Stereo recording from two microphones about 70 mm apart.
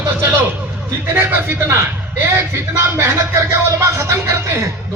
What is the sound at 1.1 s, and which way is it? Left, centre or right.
Speech, right.